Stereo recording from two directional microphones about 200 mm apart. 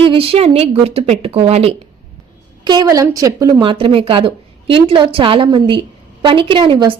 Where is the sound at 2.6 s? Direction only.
20° right (ahead or behind).